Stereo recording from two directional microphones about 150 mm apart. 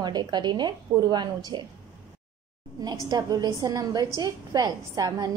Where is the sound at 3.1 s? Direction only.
25° right (ahead or behind).